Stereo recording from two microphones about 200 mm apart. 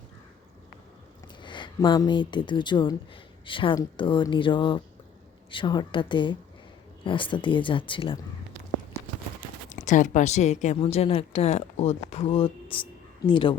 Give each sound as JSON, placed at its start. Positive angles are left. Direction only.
{"t": 1.4, "sound": "speech", "side_deg": 25}
{"t": 9.6, "sound": "a woman's voice", "side_deg": 40}